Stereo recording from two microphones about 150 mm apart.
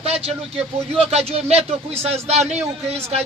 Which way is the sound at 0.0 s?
45° right (ahead or behind).